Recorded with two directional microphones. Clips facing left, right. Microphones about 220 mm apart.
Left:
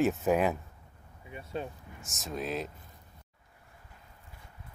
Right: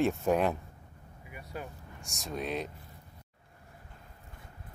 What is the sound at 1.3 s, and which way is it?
Speech, 25° left (ahead or behind).